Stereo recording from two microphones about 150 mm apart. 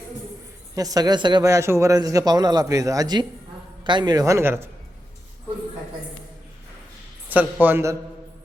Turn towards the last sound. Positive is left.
turn(degrees=-15)  # may be behind; listen again after turning